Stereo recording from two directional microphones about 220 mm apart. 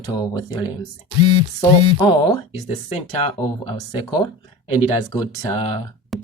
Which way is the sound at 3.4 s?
20° left (ahead or behind).